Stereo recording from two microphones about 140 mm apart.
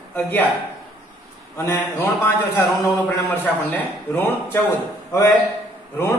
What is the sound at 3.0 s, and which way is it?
A man's voice, 10° left (ahead or behind).